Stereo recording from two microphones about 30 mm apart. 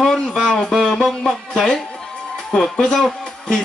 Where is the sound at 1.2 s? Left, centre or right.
Centre.